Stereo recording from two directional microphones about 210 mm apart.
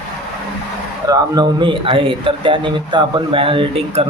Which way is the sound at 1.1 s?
20° right (ahead or behind).